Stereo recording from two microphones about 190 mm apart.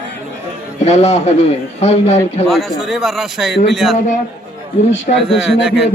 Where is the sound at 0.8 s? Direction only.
35° left (ahead or behind).